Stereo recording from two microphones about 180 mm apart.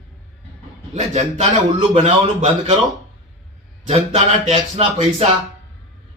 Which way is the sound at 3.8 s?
40° right (ahead or behind).